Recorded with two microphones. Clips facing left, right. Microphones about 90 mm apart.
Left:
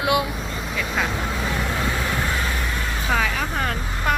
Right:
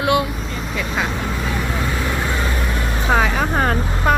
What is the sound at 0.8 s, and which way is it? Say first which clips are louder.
Vehicle: right 2 dB; 5° right (ahead or behind).